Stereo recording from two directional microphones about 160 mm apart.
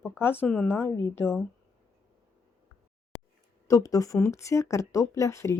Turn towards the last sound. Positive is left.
turn(degrees=20)  # may be behind; listen again after turning